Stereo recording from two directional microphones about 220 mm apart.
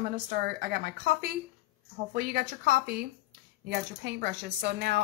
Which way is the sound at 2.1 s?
45° right (ahead or behind).